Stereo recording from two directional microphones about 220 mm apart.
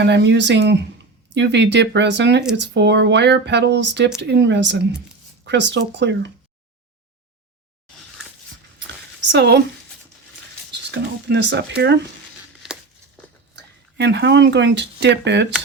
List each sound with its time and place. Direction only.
0.0 s speech: 50° right (ahead or behind)
9.3 s speech: 50° right (ahead or behind)
10.7 s speech: 50° right (ahead or behind)
13.9 s speech: 50° right (ahead or behind)